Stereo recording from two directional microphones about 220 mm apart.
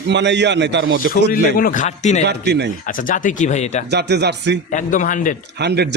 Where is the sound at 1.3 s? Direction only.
40° left (ahead or behind).